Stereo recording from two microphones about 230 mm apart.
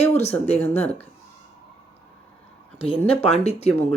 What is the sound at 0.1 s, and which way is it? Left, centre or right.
Speech, left.